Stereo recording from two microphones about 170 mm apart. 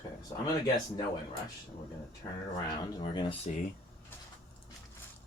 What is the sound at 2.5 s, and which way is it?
Speech, 30° left (ahead or behind).